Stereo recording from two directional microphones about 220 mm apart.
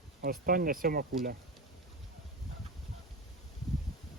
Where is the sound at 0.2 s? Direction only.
40° right (ahead or behind).